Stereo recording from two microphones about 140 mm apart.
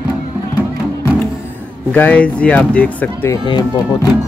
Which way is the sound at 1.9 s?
10° left (ahead or behind).